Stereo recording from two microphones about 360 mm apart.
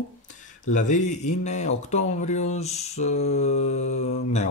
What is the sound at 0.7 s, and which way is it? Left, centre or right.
Speech, centre.